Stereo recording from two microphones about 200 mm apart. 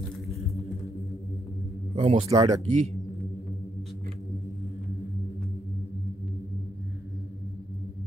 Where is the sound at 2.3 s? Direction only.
20° right (ahead or behind).